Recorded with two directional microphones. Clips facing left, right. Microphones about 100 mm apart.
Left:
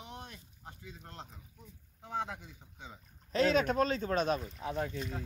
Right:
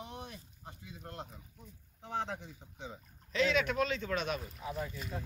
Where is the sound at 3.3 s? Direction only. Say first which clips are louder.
Left 3 dB; 40° left (ahead or behind).